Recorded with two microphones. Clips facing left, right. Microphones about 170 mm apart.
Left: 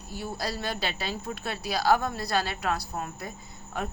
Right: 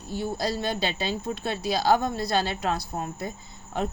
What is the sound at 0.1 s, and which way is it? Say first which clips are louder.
A woman's voice: right 5 dB; 25° right (ahead or behind).